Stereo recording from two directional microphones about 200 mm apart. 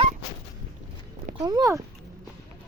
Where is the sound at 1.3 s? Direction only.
20° right (ahead or behind).